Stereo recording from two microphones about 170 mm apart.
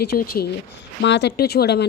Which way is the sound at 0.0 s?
65° left (ahead or behind).